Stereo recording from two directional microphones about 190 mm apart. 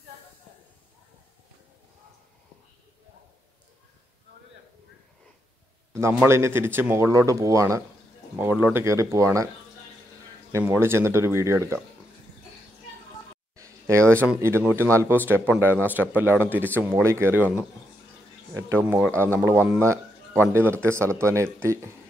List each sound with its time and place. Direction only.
5.9 s speech: 15° right (ahead or behind)
10.5 s speech: 10° right (ahead or behind)
13.6 s a sound: 15° right (ahead or behind)
14.2 s speech: 10° right (ahead or behind)